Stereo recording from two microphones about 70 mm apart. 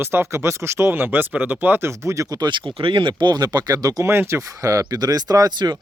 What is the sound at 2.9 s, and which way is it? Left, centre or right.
Speech, right.